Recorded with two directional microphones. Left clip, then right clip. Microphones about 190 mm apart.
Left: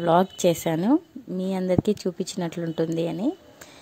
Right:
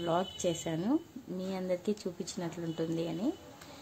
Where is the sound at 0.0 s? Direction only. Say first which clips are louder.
Left 12 dB; 45° left (ahead or behind).